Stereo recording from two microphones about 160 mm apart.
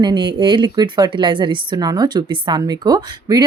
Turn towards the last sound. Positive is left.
turn(degrees=-25)  # may be behind; listen again after turning